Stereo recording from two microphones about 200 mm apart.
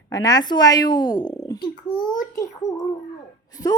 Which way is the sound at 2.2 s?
15° left (ahead or behind).